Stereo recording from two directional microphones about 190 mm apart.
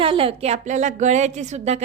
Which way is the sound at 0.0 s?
30° right (ahead or behind).